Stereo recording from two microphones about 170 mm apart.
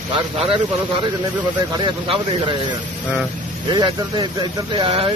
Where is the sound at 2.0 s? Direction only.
30° right (ahead or behind).